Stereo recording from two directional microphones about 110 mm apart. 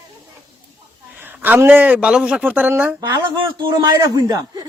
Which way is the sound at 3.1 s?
45° right (ahead or behind).